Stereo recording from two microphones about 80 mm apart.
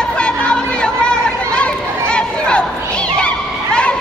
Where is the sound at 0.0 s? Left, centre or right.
Centre.